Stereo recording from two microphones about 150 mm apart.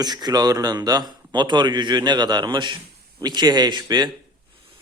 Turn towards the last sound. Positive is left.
turn(degrees=-30)  # may be behind; listen again after turning